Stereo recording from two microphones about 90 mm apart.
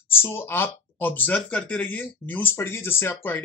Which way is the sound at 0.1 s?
25° left (ahead or behind).